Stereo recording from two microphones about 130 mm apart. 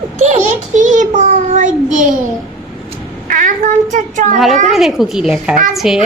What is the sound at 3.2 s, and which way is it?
Child singing, 90° right.